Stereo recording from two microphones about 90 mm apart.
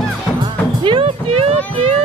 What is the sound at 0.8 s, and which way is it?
Music, 70° right (ahead or behind).